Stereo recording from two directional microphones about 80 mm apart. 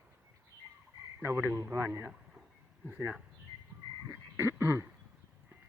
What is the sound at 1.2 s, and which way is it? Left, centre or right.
Speech, right.